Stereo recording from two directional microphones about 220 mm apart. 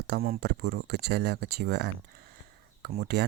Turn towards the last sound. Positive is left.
turn(degrees=-50)  # may be behind; listen again after turning